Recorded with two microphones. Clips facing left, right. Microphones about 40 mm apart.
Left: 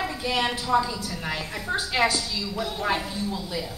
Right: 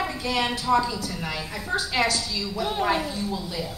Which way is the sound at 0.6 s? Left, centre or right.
Centre.